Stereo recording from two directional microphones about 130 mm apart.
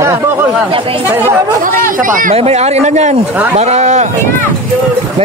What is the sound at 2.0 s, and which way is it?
Speech, 90° right.